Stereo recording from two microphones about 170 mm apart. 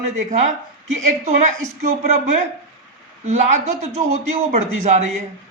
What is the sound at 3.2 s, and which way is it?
A man's voice, 45° right (ahead or behind).